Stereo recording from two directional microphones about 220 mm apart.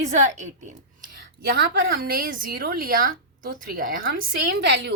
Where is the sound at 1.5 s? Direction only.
45° right (ahead or behind).